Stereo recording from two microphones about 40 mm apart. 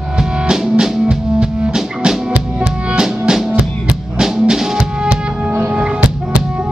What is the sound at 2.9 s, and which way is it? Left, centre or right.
Drum, centre.